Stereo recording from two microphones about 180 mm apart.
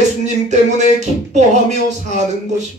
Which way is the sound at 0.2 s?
40° right (ahead or behind).